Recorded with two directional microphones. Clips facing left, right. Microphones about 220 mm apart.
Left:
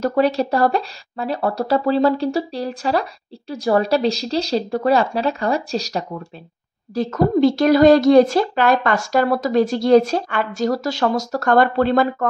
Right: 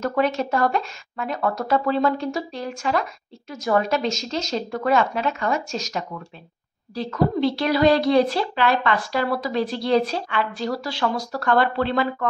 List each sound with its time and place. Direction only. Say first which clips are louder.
0.0 s speech: left 5 dB; 35° left (ahead or behind)
6.9 s a woman's voice: left 5 dB; 45° left (ahead or behind)